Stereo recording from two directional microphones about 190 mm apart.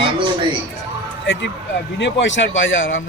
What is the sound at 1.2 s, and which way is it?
Speech, 70° left (ahead or behind).